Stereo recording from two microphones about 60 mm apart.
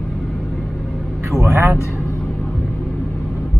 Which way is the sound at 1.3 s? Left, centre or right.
Right.